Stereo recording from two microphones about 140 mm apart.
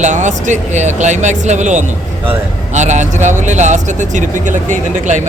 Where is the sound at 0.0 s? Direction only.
60° right (ahead or behind).